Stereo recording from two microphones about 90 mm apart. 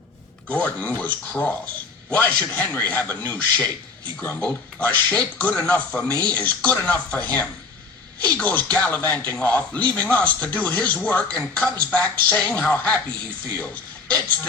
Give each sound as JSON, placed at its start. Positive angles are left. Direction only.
{"t": 0.4, "sound": "a man's voice", "side_deg": 15}